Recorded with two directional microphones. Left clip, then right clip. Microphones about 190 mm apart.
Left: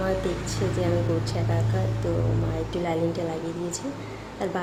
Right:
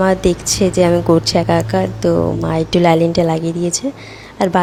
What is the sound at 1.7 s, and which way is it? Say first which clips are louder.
Speech: right 14 dB; 55° right (ahead or behind).